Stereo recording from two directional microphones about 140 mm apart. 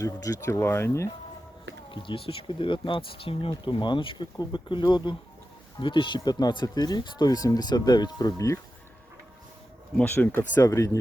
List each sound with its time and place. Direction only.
0.0 s speech: 20° left (ahead or behind)
1.9 s speech: 35° left (ahead or behind)
10.0 s speech: 10° left (ahead or behind)